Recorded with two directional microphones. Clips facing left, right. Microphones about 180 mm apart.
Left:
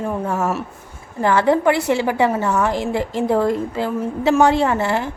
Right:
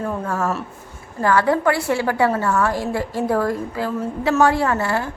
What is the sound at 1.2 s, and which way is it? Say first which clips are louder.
A woman's voice: left 2 dB; 25° left (ahead or behind).